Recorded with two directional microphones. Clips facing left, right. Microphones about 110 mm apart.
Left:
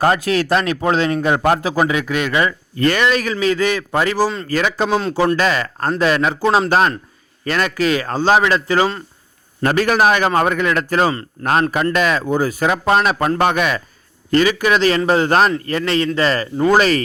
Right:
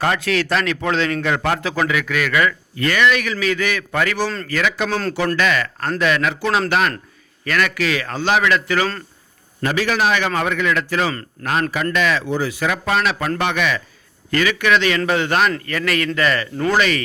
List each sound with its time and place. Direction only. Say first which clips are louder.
0.0 s a man's voice: left 4 dB; 35° left (ahead or behind)
4.9 s speech: left 4 dB; 15° left (ahead or behind)
5.4 s a man's voice: left 2 dB; 30° left (ahead or behind)
9.6 s a man's voice: left 4 dB; 45° left (ahead or behind)
14.3 s a man's voice: left 3 dB; 30° left (ahead or behind)